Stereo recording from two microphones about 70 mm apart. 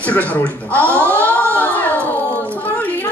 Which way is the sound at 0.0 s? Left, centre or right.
Left.